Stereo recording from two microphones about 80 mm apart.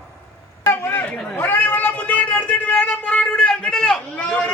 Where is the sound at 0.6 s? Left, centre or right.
Left.